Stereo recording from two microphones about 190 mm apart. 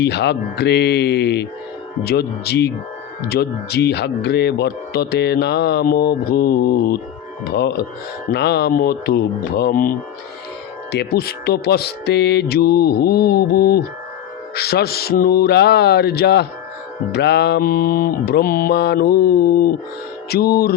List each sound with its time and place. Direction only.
0.0 s speech: 60° left (ahead or behind)
10.9 s speech: 55° left (ahead or behind)